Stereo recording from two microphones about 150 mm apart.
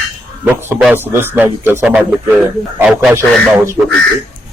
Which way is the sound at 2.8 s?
5° right (ahead or behind).